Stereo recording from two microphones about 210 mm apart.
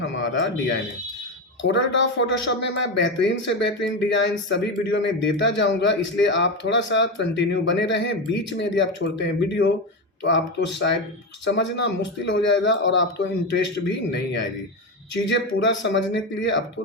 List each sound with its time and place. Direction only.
0.0 s speech: 60° left (ahead or behind)
1.6 s speech: 60° left (ahead or behind)